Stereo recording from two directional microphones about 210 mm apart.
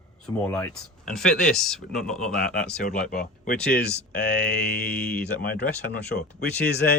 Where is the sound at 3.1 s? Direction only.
45° left (ahead or behind).